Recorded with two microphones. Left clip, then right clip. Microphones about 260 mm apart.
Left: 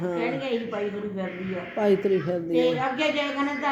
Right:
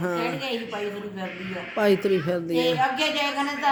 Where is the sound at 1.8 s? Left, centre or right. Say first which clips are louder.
Right 1 dB; right.